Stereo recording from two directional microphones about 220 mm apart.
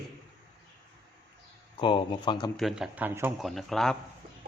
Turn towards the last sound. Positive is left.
turn(degrees=0)  # may be behind; listen again after turning